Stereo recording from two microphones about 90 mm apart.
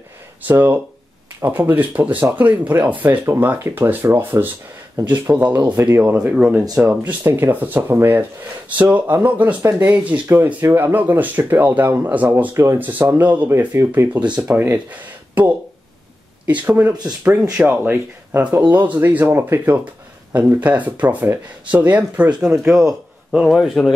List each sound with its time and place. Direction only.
0.5 s speech: 20° right (ahead or behind)
6.1 s speech: 10° right (ahead or behind)
16.6 s speech: 20° right (ahead or behind); by 23.9 s centre (ahead or behind)